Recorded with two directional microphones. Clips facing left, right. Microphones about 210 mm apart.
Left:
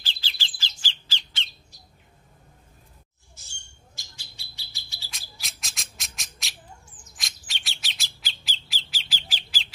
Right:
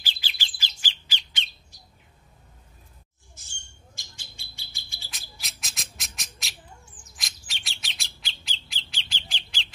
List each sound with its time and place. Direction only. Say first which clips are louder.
0.0 s bird: even; 15° right (ahead or behind)
3.3 s bird: even; 50° right (ahead or behind)
5.4 s a sound: right 2 dB; centre (ahead or behind)
7.2 s bird: left 1 dB; centre (ahead or behind)